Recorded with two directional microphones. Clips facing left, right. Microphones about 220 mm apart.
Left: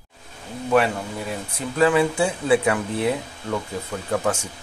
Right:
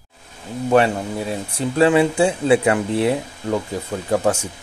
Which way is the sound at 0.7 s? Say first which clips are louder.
Right 3 dB; 30° right (ahead or behind).